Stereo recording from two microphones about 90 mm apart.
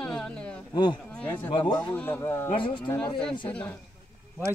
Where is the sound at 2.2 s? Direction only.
30° left (ahead or behind).